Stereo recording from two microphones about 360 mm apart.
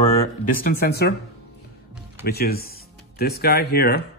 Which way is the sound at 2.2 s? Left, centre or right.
Left.